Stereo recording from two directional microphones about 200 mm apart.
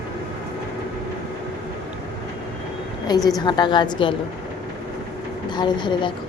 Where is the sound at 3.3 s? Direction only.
20° left (ahead or behind).